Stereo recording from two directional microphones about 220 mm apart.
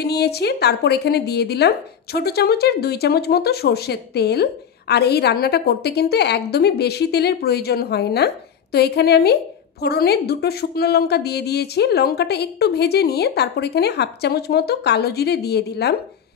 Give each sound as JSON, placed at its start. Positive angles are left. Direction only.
{"t": 0.0, "sound": "a woman's voice", "side_deg": 45}